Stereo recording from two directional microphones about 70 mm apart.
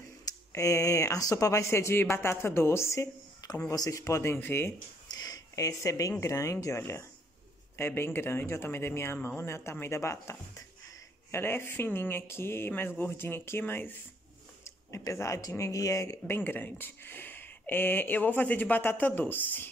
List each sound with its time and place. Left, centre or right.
0.5 s speech: left
5.1 s a sound: left
6.2 s speech: left
11.3 s speech: left
14.6 s speech: left
16.3 s speech: left